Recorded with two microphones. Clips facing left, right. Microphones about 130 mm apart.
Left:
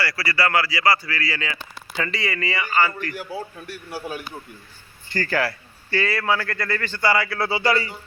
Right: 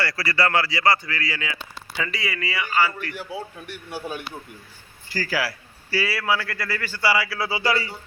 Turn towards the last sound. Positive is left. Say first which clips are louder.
# left 2 dB
turn(degrees=-10)  # may be behind; listen again after turning